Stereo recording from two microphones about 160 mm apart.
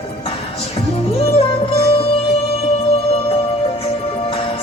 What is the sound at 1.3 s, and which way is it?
Music, 35° left (ahead or behind).